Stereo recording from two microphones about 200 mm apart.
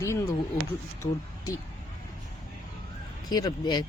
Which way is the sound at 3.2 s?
20° left (ahead or behind).